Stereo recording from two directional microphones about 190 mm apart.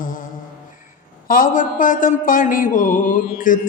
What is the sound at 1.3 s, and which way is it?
Mantra, 45° left (ahead or behind).